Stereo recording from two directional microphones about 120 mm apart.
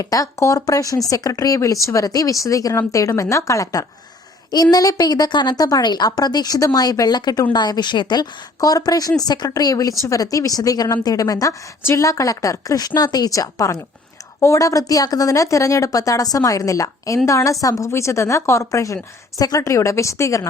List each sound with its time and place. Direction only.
0.0 s a woman's voice: 30° left (ahead or behind)